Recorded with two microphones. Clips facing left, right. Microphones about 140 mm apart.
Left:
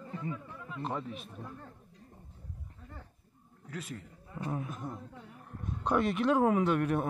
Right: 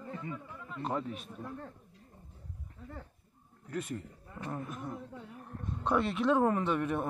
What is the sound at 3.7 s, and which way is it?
A man's voice, centre (ahead or behind).